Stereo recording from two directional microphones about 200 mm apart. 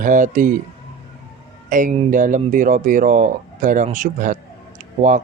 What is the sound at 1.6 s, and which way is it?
Speech, 40° right (ahead or behind).